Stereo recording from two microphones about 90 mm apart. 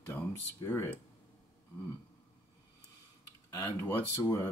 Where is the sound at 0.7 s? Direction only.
25° left (ahead or behind).